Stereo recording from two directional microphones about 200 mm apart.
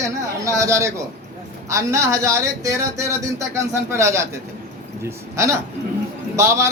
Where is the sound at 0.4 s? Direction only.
15° right (ahead or behind).